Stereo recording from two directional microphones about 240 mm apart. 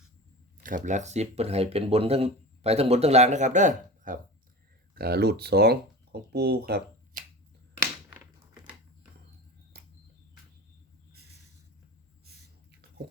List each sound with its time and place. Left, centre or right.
0.6 s speech: right